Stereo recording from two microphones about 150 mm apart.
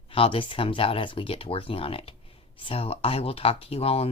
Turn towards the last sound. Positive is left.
turn(degrees=40)  # may be behind; listen again after turning